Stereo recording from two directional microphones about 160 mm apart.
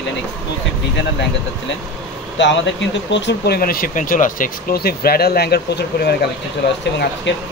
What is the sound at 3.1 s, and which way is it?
Speech, 90° left.